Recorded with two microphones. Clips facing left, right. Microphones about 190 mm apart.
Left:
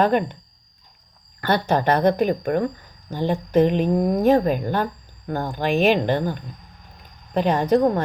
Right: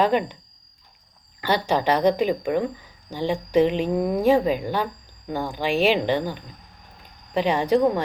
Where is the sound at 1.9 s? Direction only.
55° left (ahead or behind).